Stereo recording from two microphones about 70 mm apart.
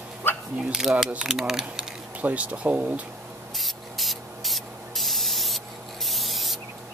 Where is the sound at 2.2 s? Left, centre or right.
Right.